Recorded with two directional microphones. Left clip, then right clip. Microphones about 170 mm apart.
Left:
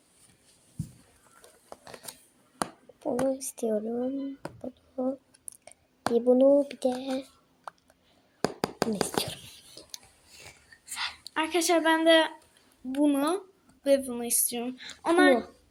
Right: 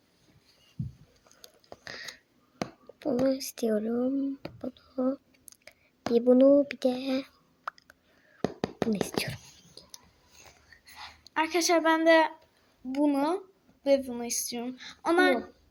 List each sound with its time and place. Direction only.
1.8 s a sound: 20° right (ahead or behind)
3.0 s speech: 20° right (ahead or behind)
5.5 s whispering: 15° right (ahead or behind)
6.3 s speech: 15° right (ahead or behind)
8.6 s whispering: 15° right (ahead or behind)
10.9 s a sound: 30° left (ahead or behind)
11.3 s speech: centre (ahead or behind)